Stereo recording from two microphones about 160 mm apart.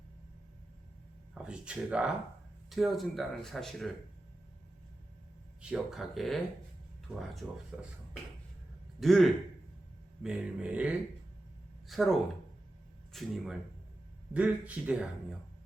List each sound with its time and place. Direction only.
1.3 s speech: 5° right (ahead or behind)
5.6 s a man's voice: 5° right (ahead or behind)